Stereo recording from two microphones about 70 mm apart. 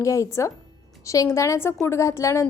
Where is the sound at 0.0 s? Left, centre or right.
Left.